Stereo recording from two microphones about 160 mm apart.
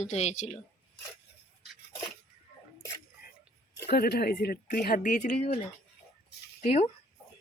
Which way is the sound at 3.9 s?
75° left (ahead or behind).